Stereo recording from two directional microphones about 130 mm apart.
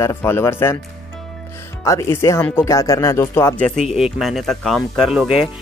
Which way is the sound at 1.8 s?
20° left (ahead or behind).